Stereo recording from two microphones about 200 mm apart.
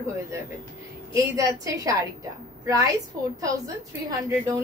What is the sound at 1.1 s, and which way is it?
A woman's voice, 15° right (ahead or behind).